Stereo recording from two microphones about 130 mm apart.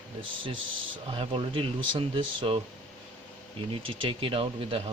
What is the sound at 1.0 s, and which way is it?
Speech, 45° right (ahead or behind).